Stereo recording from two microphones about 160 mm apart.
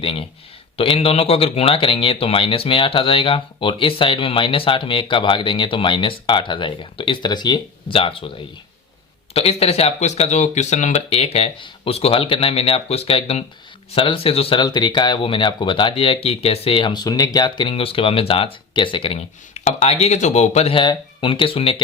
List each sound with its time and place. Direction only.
0.0 s speech: 35° left (ahead or behind)
9.3 s speech: 40° left (ahead or behind)